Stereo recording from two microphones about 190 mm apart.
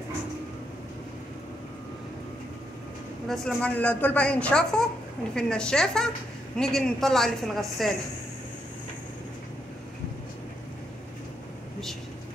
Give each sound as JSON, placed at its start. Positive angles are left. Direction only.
{"t": 3.3, "sound": "a woman's voice", "side_deg": 5}